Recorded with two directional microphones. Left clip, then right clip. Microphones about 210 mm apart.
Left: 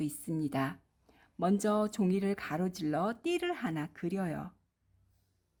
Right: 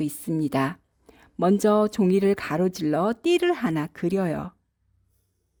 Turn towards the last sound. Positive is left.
turn(degrees=-45)  # may be behind; listen again after turning